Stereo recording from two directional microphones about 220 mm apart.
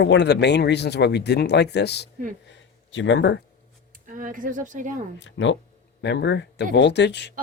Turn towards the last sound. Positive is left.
turn(degrees=50)  # may be behind; listen again after turning